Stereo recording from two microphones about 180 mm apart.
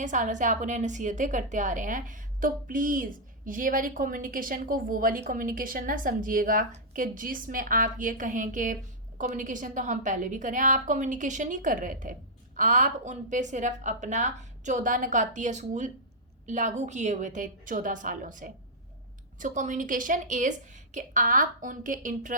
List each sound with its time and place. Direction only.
0.0 s a woman's voice: 45° right (ahead or behind)